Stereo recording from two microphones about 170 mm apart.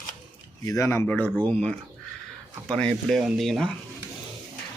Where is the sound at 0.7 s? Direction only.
15° left (ahead or behind).